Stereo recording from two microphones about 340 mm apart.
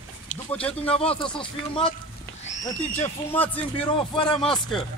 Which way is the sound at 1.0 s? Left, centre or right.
Centre.